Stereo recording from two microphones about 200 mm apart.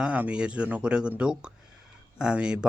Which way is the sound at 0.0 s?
5° right (ahead or behind).